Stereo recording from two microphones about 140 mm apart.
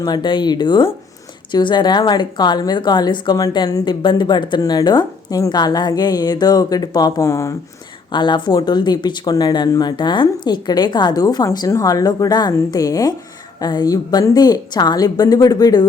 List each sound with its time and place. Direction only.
0.0 s a woman's voice: 30° left (ahead or behind)
8.1 s a woman's voice: 35° left (ahead or behind)